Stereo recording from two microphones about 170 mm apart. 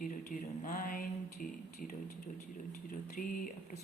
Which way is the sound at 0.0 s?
55° left (ahead or behind).